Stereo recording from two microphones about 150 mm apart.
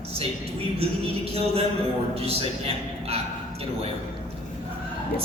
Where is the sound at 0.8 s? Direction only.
40° right (ahead or behind).